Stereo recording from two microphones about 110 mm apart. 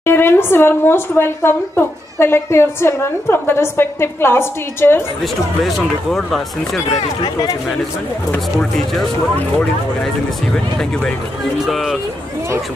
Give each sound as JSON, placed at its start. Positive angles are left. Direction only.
{"t": 0.0, "sound": "a woman's voice", "side_deg": 20}
{"t": 5.2, "sound": "speech", "side_deg": 0}
{"t": 8.5, "sound": "speech", "side_deg": 5}
{"t": 10.5, "sound": "speech", "side_deg": 5}